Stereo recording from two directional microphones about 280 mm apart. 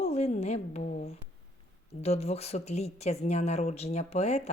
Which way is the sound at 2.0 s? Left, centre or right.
Left.